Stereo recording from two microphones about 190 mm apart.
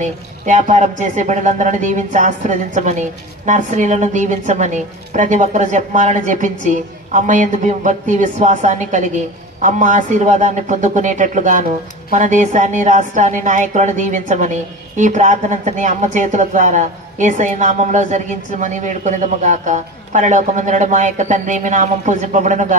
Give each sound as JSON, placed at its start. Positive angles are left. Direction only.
{"t": 0.0, "sound": "speech", "side_deg": -40}